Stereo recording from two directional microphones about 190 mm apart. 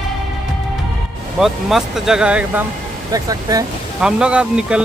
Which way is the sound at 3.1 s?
20° right (ahead or behind).